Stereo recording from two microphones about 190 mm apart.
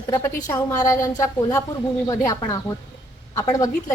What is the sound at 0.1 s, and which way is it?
A woman's voice, 15° left (ahead or behind).